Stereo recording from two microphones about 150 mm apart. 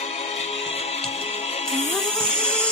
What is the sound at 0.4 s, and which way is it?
Music, 45° left (ahead or behind).